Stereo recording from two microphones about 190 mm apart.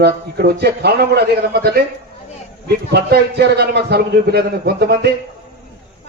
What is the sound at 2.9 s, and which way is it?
A man's voice, 60° right (ahead or behind).